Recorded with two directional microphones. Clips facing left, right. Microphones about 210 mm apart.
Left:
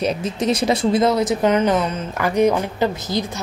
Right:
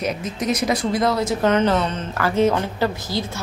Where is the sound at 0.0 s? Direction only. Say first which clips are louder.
Left 4 dB; 30° left (ahead or behind).